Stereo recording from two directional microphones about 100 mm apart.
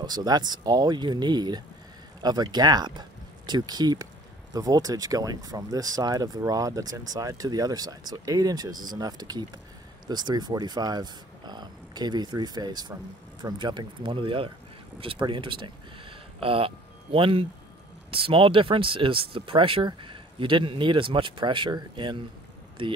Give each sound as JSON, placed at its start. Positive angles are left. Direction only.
{"t": 0.0, "sound": "speech", "side_deg": -45}